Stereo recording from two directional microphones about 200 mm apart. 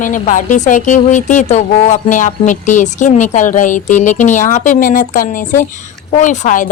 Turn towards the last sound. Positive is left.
turn(degrees=40)  # may be behind; listen again after turning